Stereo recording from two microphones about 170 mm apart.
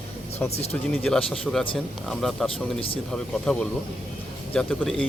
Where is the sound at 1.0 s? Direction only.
5° left (ahead or behind).